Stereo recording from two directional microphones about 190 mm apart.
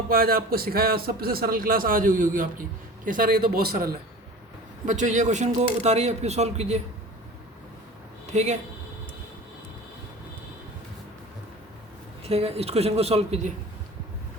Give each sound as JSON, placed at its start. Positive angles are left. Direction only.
{"t": 0.1, "sound": "a man's voice", "side_deg": -50}
{"t": 4.9, "sound": "speech", "side_deg": -40}
{"t": 8.3, "sound": "speech", "side_deg": -35}
{"t": 12.2, "sound": "speech", "side_deg": -30}